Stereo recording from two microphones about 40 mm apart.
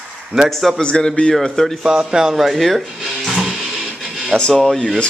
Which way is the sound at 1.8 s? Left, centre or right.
Centre.